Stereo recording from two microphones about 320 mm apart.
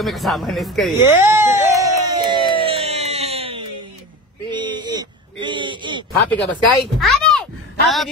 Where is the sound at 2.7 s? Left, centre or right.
Centre.